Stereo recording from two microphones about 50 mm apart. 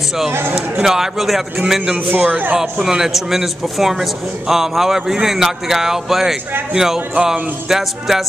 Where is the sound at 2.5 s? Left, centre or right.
Centre.